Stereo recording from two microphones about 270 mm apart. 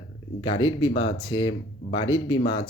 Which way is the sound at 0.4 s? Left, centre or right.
Centre.